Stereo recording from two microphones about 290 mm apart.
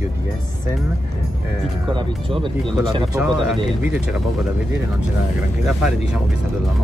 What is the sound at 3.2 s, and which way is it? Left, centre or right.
Speech, centre.